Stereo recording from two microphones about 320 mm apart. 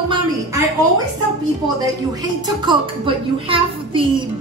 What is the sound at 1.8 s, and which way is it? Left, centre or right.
A woman's voice, centre.